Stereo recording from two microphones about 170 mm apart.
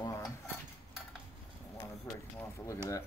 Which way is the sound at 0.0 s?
20° left (ahead or behind).